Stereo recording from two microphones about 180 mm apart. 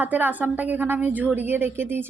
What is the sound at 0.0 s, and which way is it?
A woman's voice, 10° right (ahead or behind).